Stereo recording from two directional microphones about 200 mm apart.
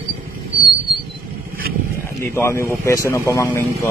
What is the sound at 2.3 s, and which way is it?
A man's voice, 15° left (ahead or behind).